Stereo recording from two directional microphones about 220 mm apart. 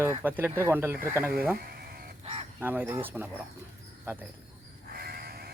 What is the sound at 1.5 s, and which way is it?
Sheep, 45° right (ahead or behind).